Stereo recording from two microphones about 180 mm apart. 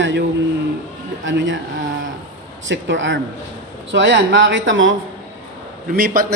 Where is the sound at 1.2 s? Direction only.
90° right.